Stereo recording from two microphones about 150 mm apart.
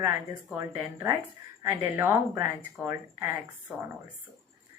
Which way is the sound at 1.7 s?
20° right (ahead or behind).